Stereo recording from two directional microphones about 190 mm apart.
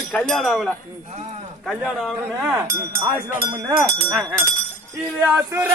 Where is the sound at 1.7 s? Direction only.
Centre (ahead or behind).